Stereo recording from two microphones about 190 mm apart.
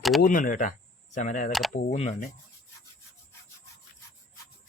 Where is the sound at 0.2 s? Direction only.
45° left (ahead or behind).